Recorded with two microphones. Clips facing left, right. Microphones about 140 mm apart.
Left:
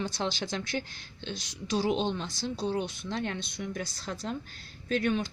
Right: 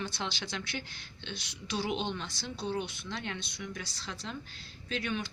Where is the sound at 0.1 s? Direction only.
45° left (ahead or behind).